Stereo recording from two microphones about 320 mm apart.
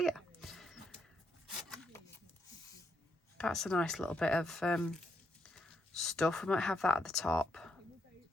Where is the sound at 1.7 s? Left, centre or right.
Centre.